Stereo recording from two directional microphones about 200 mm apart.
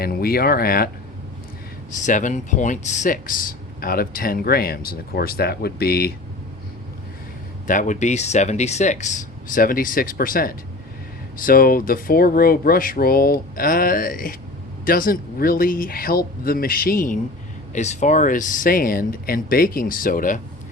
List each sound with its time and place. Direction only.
0.0 s speech: 50° left (ahead or behind)
2.0 s speech: 40° left (ahead or behind)
7.7 s speech: 40° left (ahead or behind)